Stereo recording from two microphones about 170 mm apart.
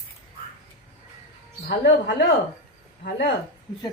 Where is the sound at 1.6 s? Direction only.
70° left (ahead or behind).